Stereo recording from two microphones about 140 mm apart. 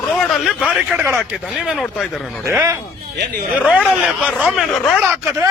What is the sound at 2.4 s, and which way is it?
Speech, 15° right (ahead or behind).